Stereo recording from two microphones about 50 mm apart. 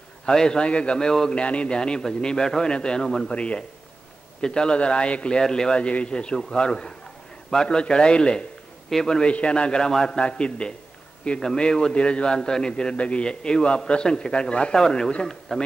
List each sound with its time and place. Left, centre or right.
0.2 s a man's voice: centre
3.3 s a man's voice: left